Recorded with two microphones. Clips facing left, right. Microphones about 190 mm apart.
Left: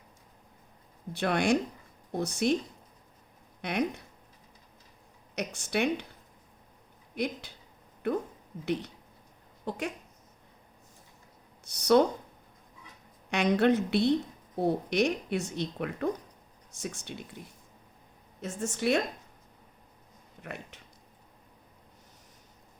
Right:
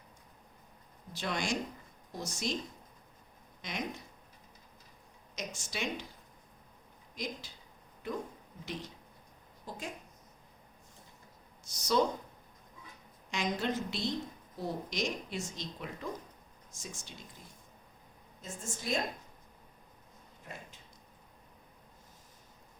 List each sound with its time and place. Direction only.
1.1 s a woman's voice: 60° left (ahead or behind)
3.6 s a woman's voice: 60° left (ahead or behind)
5.3 s a woman's voice: 65° left (ahead or behind)
7.2 s a woman's voice: 65° left (ahead or behind)
11.6 s speech: 65° left (ahead or behind)
13.3 s a woman's voice: 65° left (ahead or behind)
20.4 s a sound: 70° left (ahead or behind)